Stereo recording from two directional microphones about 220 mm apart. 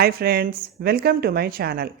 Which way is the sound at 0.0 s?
45° right (ahead or behind).